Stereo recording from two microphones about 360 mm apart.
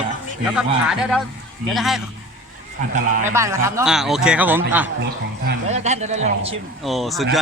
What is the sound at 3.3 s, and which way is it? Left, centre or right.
Speech, centre.